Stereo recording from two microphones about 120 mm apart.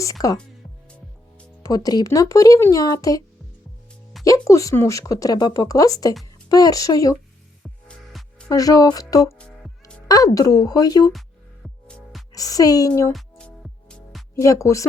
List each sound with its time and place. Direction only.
0.0 s speech: 30° left (ahead or behind)
1.6 s a woman's voice: 30° left (ahead or behind)
7.9 s music: 10° left (ahead or behind)
8.4 s a woman's voice: 30° left (ahead or behind)
12.3 s speech: 30° left (ahead or behind)
13.8 s music: 5° left (ahead or behind)
14.3 s speech: 25° left (ahead or behind)